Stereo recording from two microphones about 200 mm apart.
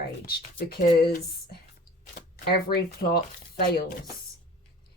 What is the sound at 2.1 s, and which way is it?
Speech, 55° left (ahead or behind).